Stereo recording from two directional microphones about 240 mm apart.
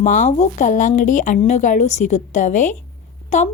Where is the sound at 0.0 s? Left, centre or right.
Left.